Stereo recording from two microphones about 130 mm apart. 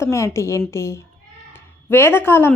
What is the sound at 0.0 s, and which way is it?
A woman's voice, 20° left (ahead or behind).